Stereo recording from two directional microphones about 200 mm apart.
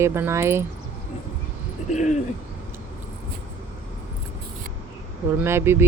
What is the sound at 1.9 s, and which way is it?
Speech, 35° left (ahead or behind).